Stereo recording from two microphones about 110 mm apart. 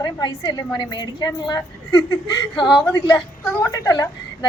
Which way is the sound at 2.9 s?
30° left (ahead or behind).